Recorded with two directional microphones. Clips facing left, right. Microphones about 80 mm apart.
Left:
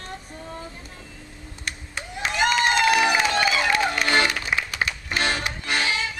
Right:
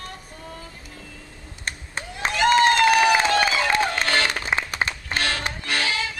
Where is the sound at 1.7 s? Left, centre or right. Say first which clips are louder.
Right 2 dB; right.